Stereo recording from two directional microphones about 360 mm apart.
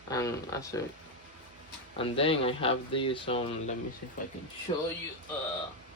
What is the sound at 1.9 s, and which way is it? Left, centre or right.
Speech, centre.